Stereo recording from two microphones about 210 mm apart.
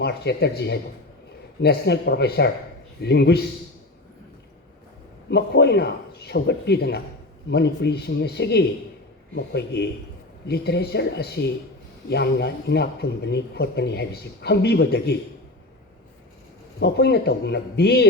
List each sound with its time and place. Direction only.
0.0 s speech: 50° left (ahead or behind)
5.3 s speech: 55° left (ahead or behind)
16.8 s speech: 50° left (ahead or behind)